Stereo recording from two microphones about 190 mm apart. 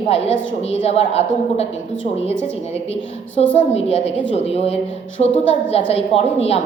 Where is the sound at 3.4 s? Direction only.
30° left (ahead or behind).